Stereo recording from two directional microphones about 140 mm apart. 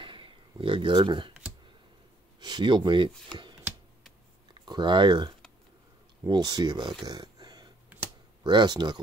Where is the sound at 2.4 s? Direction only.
30° right (ahead or behind).